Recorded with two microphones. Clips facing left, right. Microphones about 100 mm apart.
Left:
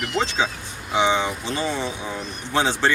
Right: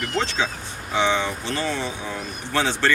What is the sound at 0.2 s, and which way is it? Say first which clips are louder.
Speech: left 2 dB; 15° left (ahead or behind).